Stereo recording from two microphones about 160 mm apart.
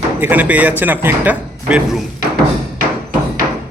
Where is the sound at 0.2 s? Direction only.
10° right (ahead or behind).